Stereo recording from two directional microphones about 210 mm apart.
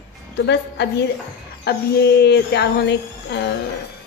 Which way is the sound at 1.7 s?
50° left (ahead or behind).